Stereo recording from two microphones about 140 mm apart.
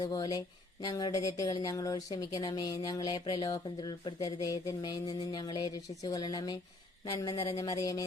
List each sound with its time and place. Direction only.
0.0 s speech: 30° left (ahead or behind)